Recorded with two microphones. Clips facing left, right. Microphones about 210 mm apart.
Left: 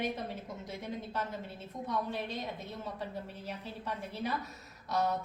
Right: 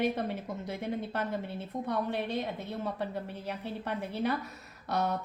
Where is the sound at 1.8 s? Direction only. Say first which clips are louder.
Right 3 dB; 60° right (ahead or behind).